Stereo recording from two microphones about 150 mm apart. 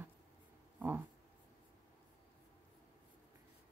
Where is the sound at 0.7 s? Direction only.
15° right (ahead or behind).